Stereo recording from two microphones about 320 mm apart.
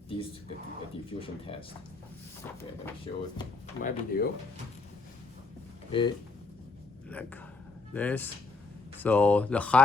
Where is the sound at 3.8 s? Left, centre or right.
Left.